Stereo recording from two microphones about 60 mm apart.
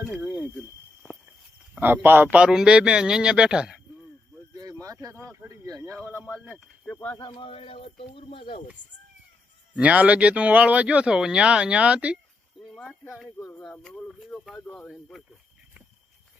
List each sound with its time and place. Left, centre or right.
1.0 s walk: right
1.8 s speech: right
2.3 s a man's voice: centre
4.7 s a sound: right
5.5 s speech: right
9.7 s speech: right
14.5 s speech: centre